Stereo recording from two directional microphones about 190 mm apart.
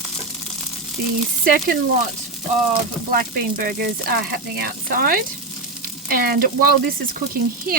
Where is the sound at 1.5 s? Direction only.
55° right (ahead or behind).